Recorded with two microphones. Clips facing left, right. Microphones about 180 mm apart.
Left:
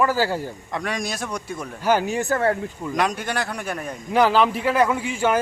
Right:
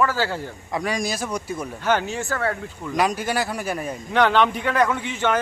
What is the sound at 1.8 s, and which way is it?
Speech, 10° left (ahead or behind).